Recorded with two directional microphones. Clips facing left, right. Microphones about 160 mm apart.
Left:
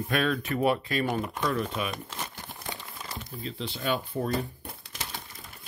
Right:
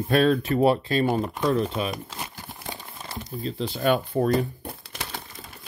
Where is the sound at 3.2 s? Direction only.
35° right (ahead or behind).